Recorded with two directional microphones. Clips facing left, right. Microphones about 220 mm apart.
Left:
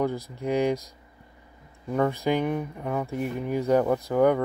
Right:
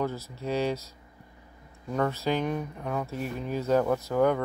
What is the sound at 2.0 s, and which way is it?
Speech, 15° left (ahead or behind).